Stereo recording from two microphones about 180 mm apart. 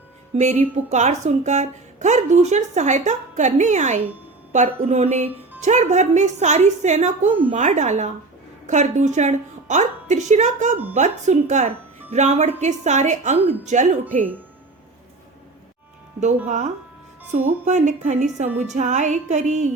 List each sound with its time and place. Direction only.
0.3 s speech: 40° right (ahead or behind)
16.5 s speech: 40° right (ahead or behind)